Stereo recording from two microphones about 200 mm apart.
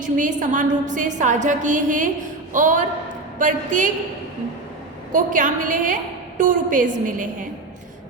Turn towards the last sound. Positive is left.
turn(degrees=-40)  # may be behind; listen again after turning